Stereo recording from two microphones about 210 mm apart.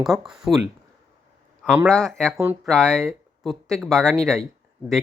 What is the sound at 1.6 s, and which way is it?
Speech, 5° right (ahead or behind).